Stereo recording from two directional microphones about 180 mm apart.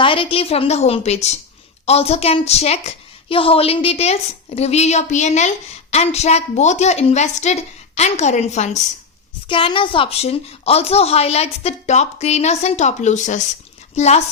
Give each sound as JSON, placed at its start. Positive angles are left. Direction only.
{"t": 0.0, "sound": "a woman's voice", "side_deg": 30}
{"t": 9.5, "sound": "a woman's voice", "side_deg": 30}